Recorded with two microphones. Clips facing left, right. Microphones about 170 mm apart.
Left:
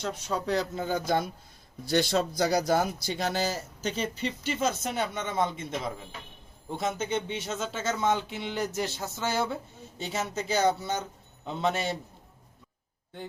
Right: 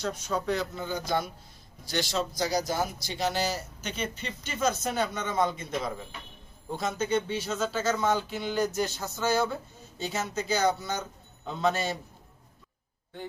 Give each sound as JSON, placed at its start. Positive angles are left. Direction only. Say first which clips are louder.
{"t": 0.0, "sound": "speech", "louder": "right 1 dB", "side_deg": 30}
{"t": 3.8, "sound": "speech", "louder": "left 5 dB", "side_deg": 35}
{"t": 6.7, "sound": "speech", "louder": "right 2 dB", "side_deg": 20}